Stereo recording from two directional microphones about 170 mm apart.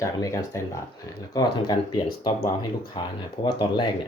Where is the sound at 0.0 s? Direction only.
20° left (ahead or behind).